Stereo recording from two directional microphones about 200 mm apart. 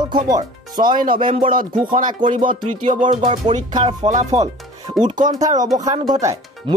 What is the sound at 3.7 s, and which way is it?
Speech, 25° right (ahead or behind).